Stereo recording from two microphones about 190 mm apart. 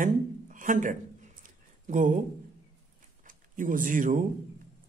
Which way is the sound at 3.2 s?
45° right (ahead or behind).